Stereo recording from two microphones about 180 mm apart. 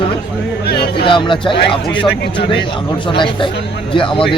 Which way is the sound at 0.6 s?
65° left (ahead or behind).